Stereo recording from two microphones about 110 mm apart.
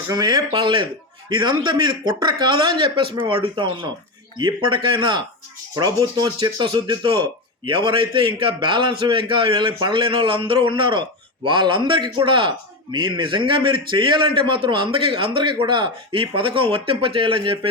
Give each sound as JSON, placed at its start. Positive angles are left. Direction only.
{"t": 0.1, "sound": "speech", "side_deg": -40}
{"t": 0.5, "sound": "a man's voice", "side_deg": -50}
{"t": 5.7, "sound": "a man's voice", "side_deg": -35}